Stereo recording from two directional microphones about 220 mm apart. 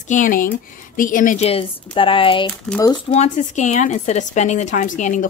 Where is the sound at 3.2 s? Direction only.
30° left (ahead or behind).